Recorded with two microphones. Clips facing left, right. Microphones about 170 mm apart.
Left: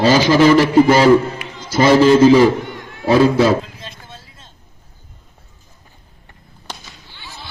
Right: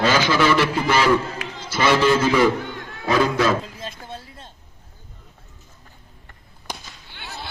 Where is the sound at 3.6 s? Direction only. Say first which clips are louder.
Right 3 dB; 50° right (ahead or behind).